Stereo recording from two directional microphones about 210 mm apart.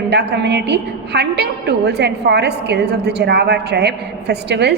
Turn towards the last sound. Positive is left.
turn(degrees=-50)  # may be behind; listen again after turning